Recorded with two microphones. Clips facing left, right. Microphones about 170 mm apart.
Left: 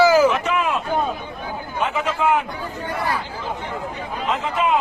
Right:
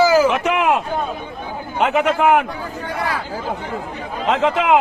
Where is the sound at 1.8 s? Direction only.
70° right (ahead or behind).